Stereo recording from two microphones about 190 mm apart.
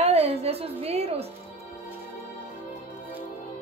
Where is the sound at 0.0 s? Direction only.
35° right (ahead or behind).